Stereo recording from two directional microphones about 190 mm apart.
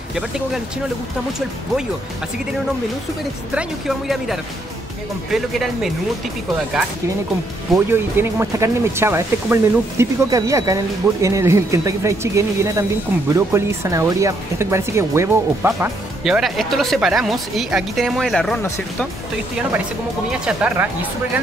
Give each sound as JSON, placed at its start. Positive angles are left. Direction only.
{"t": 3.5, "sound": "speech", "side_deg": 0}
{"t": 7.7, "sound": "speech", "side_deg": -15}
{"t": 20.2, "sound": "speech", "side_deg": -5}